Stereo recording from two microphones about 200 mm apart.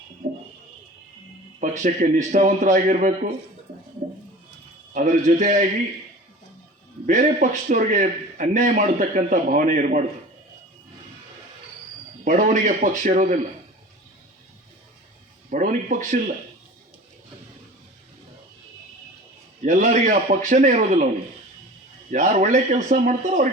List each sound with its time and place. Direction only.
0.2 s a sound: 40° right (ahead or behind)
1.8 s a man's voice: 40° right (ahead or behind)
4.9 s a man's voice: 35° right (ahead or behind)
7.1 s a man's voice: 40° right (ahead or behind)
12.2 s a man's voice: 40° right (ahead or behind)
15.4 s a sound: 40° right (ahead or behind)
19.6 s a man's voice: 40° right (ahead or behind)
22.1 s a man's voice: 40° right (ahead or behind)